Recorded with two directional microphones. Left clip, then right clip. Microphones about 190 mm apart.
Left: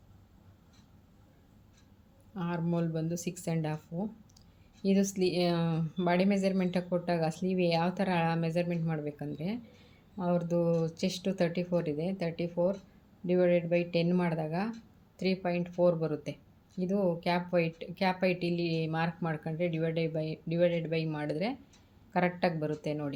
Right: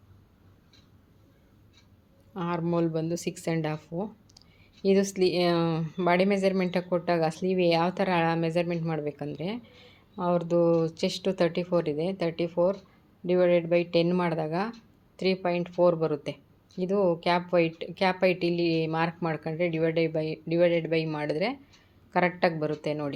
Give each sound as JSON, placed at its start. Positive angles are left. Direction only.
{"t": 2.3, "sound": "speech", "side_deg": -10}